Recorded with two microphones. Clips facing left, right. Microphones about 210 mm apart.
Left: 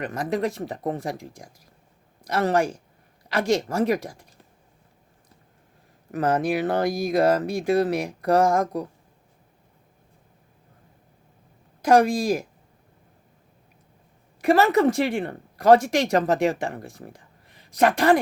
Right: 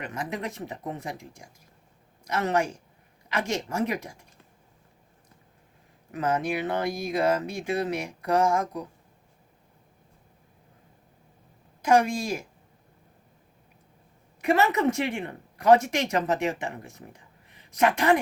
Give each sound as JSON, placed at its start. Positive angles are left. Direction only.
{"t": 0.0, "sound": "speech", "side_deg": 35}
{"t": 2.2, "sound": "speech", "side_deg": 35}
{"t": 6.2, "sound": "speech", "side_deg": 35}
{"t": 11.8, "sound": "speech", "side_deg": 35}
{"t": 14.4, "sound": "speech", "side_deg": 35}